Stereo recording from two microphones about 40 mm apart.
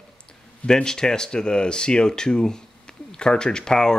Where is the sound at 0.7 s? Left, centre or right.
Centre.